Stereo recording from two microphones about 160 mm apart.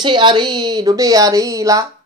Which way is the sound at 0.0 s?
30° right (ahead or behind).